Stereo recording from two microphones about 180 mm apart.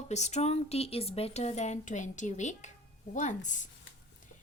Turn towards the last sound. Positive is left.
turn(degrees=45)  # may be behind; listen again after turning